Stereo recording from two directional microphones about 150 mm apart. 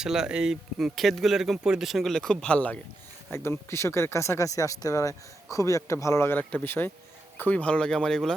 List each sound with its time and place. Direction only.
0.0 s speech: 5° right (ahead or behind)